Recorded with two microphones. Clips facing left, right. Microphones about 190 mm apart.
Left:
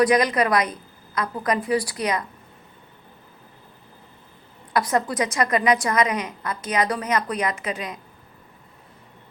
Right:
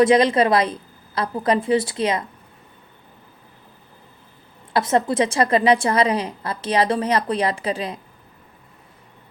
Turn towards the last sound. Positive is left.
turn(degrees=-30)  # may be behind; listen again after turning